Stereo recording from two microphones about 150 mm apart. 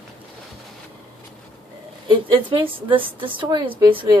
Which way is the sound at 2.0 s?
35° right (ahead or behind).